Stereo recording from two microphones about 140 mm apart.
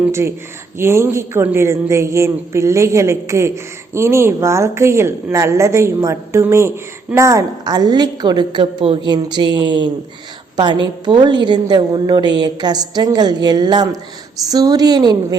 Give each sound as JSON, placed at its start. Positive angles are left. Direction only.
{"t": 0.0, "sound": "a woman's voice", "side_deg": -20}